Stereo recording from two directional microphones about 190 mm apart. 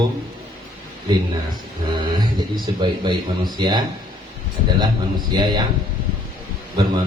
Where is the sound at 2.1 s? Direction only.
25° right (ahead or behind).